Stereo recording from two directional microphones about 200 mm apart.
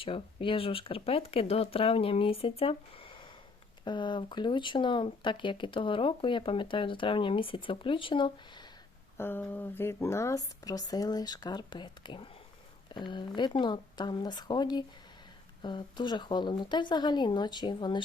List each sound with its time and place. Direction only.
0.0 s speech: 25° left (ahead or behind)
9.1 s speech: 10° left (ahead or behind)